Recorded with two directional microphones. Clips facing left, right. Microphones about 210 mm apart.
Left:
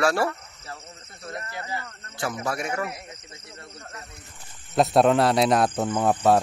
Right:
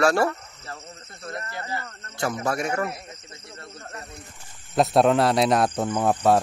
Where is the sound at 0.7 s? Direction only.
10° left (ahead or behind).